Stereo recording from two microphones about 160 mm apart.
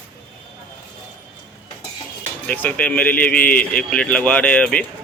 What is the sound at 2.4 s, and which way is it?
A man's voice, 10° left (ahead or behind).